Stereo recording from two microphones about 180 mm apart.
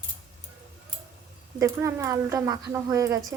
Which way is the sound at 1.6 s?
15° right (ahead or behind).